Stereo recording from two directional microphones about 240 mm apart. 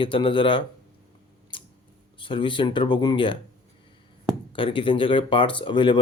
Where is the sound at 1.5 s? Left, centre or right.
Left.